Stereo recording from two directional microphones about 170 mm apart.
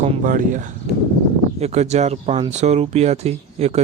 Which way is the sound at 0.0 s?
50° right (ahead or behind).